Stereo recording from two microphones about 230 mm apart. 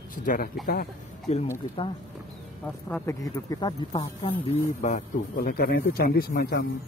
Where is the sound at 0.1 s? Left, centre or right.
Left.